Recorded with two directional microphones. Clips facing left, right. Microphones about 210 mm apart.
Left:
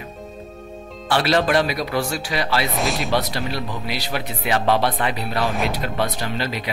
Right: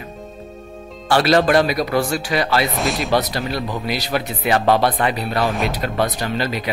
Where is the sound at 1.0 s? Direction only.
45° right (ahead or behind).